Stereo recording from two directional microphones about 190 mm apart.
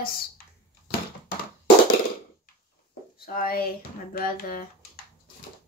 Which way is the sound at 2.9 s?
50° left (ahead or behind).